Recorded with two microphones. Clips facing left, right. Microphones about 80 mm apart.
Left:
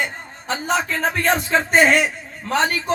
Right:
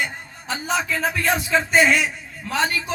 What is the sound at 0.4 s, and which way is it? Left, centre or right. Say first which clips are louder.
A man's voice: left 3 dB; left.